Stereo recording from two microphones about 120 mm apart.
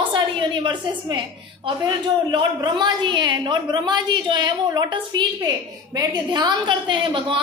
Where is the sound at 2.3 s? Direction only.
35° right (ahead or behind).